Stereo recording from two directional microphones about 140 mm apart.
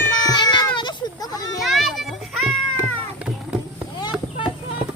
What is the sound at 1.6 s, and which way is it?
Music, centre (ahead or behind).